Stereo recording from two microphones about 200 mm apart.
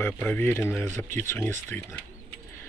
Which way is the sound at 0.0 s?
10° left (ahead or behind).